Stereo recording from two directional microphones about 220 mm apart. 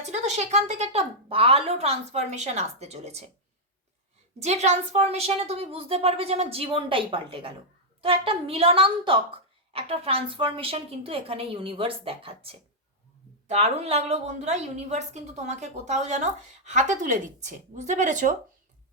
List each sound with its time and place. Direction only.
0.0 s a woman's voice: 30° right (ahead or behind)
4.4 s a woman's voice: 30° right (ahead or behind)